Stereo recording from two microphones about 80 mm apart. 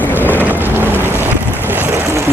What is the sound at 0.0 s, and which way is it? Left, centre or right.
Boat, left.